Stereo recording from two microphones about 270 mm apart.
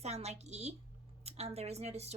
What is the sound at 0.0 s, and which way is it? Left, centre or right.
Speech, right.